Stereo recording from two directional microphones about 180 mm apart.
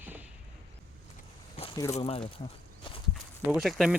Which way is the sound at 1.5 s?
30° left (ahead or behind).